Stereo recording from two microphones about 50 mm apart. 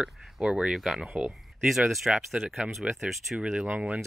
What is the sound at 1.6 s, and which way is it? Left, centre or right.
Speech, centre.